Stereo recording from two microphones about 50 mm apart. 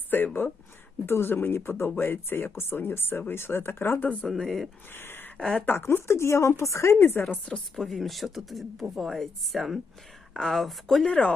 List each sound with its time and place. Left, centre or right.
0.1 s speech: left
4.0 s speech: left
4.4 s speech: centre
4.9 s a sound: left
5.4 s speech: centre
5.6 s a woman's voice: left
6.9 s speech: left
7.8 s speech: centre
11.0 s speech: left